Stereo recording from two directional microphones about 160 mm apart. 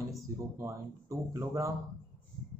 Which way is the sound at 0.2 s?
20° right (ahead or behind).